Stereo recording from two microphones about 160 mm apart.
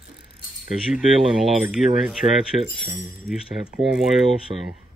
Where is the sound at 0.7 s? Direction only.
5° right (ahead or behind).